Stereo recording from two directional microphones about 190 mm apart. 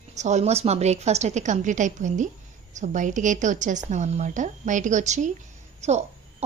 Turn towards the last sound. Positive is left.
turn(degrees=-35)  # may be behind; listen again after turning